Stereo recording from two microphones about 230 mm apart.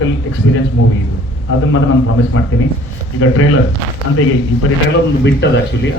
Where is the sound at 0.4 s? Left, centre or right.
Left.